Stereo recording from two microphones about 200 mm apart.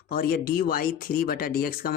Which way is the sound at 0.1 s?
45° left (ahead or behind).